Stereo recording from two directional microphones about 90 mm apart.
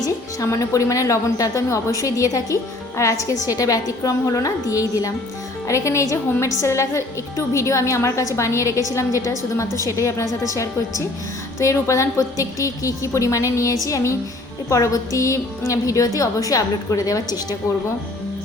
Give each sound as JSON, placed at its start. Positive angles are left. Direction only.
{"t": 0.0, "sound": "a woman's voice", "side_deg": 35}